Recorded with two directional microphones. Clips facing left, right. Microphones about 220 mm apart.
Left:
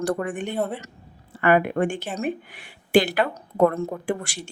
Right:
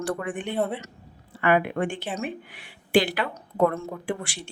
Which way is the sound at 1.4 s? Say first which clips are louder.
Left 3 dB; 45° left (ahead or behind).